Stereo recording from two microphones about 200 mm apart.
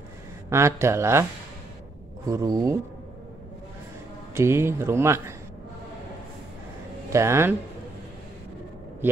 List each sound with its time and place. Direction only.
0.5 s speech: 15° right (ahead or behind)
2.2 s speech: 15° right (ahead or behind)
4.3 s speech: 15° right (ahead or behind)
7.1 s speech: 15° right (ahead or behind)
9.0 s speech: 10° right (ahead or behind)